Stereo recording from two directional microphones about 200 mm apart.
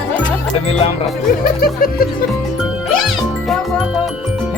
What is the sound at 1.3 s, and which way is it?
Speech, 45° left (ahead or behind).